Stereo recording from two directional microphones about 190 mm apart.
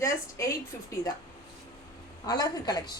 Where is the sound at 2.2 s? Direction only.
20° left (ahead or behind).